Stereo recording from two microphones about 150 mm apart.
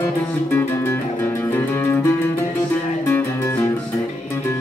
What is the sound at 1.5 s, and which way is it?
Music, 15° left (ahead or behind).